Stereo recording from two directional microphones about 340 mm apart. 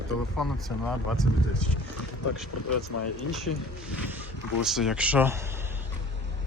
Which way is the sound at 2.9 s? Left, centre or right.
Left.